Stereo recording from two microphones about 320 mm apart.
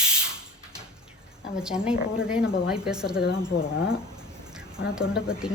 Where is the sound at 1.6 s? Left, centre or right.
Centre.